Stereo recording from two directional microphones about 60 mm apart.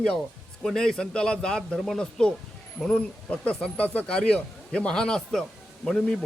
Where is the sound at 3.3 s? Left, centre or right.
Left.